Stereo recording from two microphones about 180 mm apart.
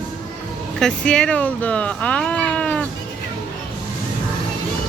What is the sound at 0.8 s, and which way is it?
Speech, 5° left (ahead or behind).